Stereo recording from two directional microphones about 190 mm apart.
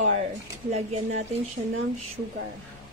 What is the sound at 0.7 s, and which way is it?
Speech, 35° right (ahead or behind).